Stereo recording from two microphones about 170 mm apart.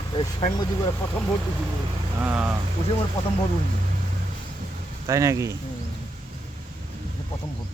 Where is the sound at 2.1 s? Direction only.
10° right (ahead or behind).